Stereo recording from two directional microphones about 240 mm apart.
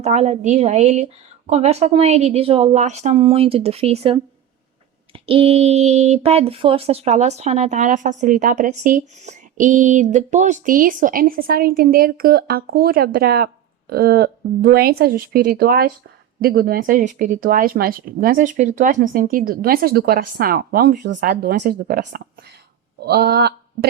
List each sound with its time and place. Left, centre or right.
0.0 s a woman's voice: right